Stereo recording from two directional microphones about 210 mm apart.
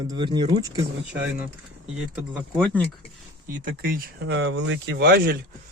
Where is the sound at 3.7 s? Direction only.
45° right (ahead or behind).